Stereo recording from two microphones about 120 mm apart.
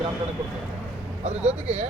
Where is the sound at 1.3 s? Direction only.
60° right (ahead or behind).